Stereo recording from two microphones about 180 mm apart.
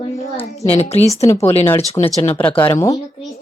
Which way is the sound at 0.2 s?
35° left (ahead or behind).